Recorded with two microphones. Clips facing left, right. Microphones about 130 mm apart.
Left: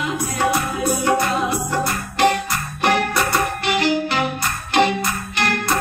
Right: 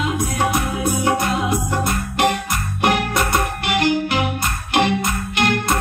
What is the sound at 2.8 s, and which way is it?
Music, 20° right (ahead or behind).